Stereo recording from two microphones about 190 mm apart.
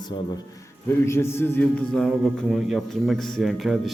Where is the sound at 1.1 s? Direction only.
15° left (ahead or behind).